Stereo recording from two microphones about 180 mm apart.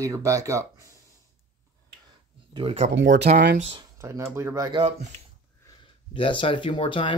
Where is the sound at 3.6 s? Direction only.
35° right (ahead or behind).